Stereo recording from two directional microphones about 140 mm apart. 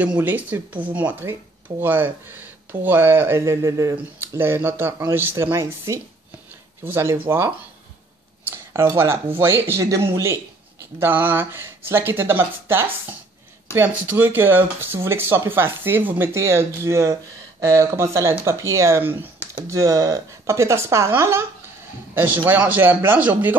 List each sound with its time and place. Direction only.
0.0 s speech: 10° right (ahead or behind)
8.9 s a man's voice: 15° right (ahead or behind)